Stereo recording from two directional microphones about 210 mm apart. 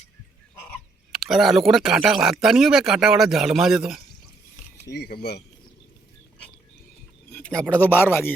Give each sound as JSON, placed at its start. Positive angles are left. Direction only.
{"t": 1.1, "sound": "speech", "side_deg": 0}
{"t": 4.9, "sound": "speech", "side_deg": 50}
{"t": 7.3, "sound": "a sound", "side_deg": 5}
{"t": 7.7, "sound": "speech", "side_deg": 10}